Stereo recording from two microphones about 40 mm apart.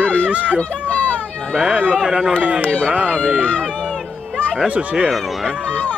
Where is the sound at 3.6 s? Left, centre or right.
Left.